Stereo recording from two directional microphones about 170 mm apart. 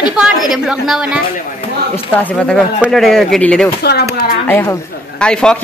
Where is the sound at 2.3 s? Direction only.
5° left (ahead or behind).